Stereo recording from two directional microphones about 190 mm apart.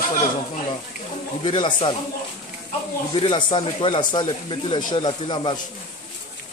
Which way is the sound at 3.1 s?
25° left (ahead or behind).